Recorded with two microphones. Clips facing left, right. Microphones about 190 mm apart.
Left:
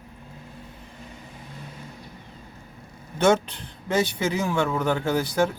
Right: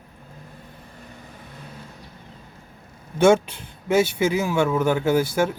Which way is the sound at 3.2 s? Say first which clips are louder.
Right 4 dB; 10° right (ahead or behind).